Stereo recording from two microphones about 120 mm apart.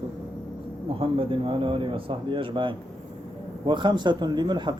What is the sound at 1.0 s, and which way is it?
Speech, 45° right (ahead or behind).